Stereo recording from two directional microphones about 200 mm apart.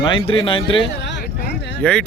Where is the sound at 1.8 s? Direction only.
5° left (ahead or behind).